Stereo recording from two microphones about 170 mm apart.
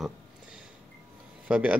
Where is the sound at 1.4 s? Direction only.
5° right (ahead or behind).